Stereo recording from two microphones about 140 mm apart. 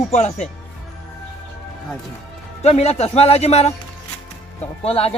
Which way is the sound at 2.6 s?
50° left (ahead or behind).